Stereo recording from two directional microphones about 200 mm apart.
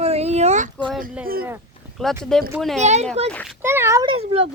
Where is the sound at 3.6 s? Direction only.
10° right (ahead or behind); by 4.4 s 25° right (ahead or behind).